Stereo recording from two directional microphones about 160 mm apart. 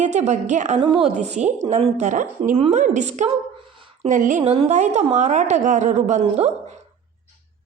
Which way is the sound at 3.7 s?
30° right (ahead or behind).